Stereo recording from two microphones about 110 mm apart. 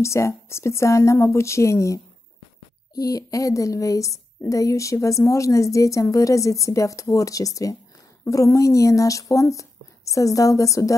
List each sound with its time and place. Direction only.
0.0 s speech: 25° left (ahead or behind)